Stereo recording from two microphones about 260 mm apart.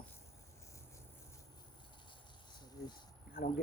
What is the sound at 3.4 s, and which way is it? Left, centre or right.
Speech, left.